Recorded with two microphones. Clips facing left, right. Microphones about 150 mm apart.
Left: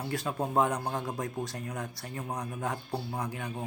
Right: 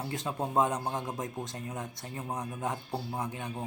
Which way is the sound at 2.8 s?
5° right (ahead or behind).